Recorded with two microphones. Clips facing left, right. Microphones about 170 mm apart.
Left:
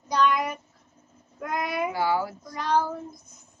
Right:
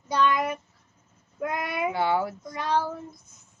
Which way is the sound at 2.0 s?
25° right (ahead or behind).